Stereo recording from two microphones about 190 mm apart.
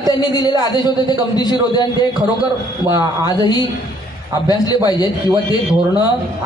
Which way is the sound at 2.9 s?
20° right (ahead or behind).